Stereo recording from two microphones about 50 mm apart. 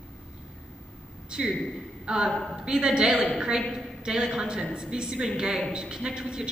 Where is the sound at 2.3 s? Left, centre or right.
Centre.